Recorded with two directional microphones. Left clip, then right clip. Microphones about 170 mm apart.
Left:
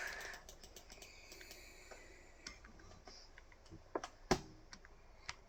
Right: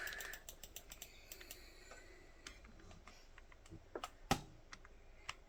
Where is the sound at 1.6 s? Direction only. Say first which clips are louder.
Left 3 dB; 30° right (ahead or behind).